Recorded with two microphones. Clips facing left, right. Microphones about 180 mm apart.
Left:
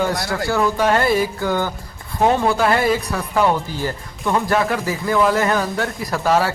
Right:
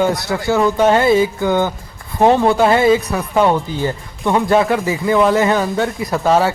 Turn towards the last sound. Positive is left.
turn(degrees=-25)  # may be behind; listen again after turning